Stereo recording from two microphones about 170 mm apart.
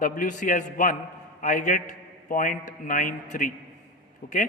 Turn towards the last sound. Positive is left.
turn(degrees=55)  # may be behind; listen again after turning